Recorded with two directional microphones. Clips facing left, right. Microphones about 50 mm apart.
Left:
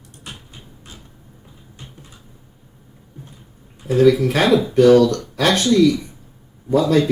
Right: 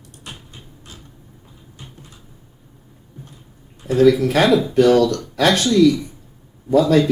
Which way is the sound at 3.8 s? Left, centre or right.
Centre.